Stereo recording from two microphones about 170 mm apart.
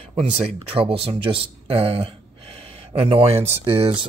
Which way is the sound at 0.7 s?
35° right (ahead or behind).